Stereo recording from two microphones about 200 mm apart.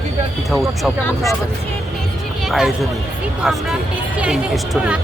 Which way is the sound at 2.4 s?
Centre (ahead or behind).